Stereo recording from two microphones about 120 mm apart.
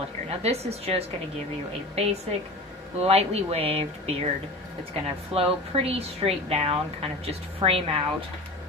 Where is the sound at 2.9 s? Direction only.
60° right (ahead or behind).